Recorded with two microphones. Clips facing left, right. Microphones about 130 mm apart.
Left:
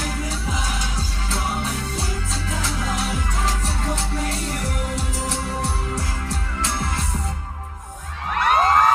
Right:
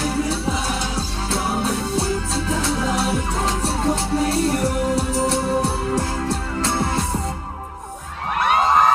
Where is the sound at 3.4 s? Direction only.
30° right (ahead or behind).